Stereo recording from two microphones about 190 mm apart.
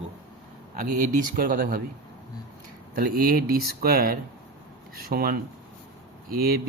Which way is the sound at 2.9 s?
50° right (ahead or behind).